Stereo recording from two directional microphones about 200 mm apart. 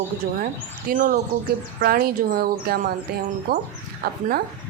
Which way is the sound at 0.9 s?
45° right (ahead or behind).